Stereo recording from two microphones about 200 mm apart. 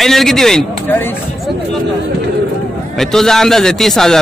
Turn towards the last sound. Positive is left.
turn(degrees=0)  # may be behind; listen again after turning